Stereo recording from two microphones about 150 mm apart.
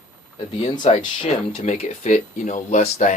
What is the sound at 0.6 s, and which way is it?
Speech, 35° left (ahead or behind).